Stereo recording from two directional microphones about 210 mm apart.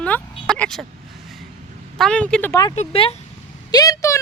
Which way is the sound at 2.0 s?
5° left (ahead or behind).